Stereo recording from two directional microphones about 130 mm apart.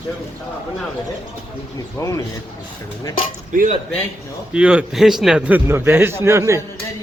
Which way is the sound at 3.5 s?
80° right.